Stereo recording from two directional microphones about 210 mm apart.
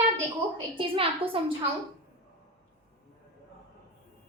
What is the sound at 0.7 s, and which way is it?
Speech, 25° right (ahead or behind).